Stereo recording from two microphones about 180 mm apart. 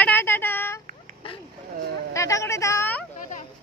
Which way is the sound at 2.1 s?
15° left (ahead or behind).